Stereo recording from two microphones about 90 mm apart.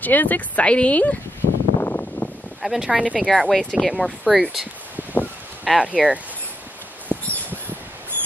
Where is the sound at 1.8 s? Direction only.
25° left (ahead or behind).